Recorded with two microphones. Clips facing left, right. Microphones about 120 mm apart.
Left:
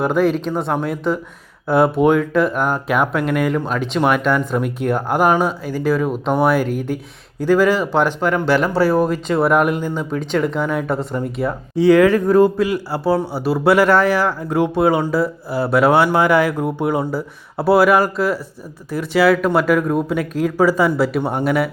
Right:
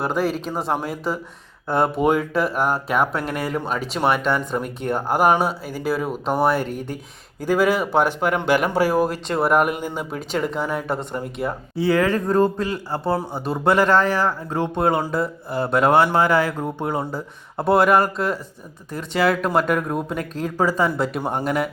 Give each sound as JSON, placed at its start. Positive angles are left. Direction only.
{"t": 0.0, "sound": "speech", "side_deg": 0}
{"t": 7.4, "sound": "speech", "side_deg": -10}
{"t": 11.8, "sound": "speech", "side_deg": 15}